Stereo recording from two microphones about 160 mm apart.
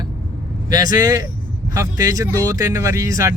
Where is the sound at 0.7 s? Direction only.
25° right (ahead or behind).